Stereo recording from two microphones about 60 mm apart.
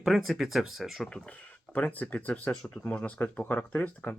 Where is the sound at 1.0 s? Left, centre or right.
Centre.